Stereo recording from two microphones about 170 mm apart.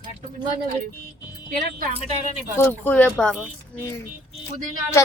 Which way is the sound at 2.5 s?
10° left (ahead or behind).